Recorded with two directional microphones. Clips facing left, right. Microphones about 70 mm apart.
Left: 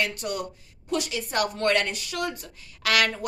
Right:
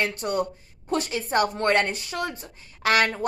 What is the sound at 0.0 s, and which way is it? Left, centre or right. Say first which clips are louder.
Speech: right 3 dB; right.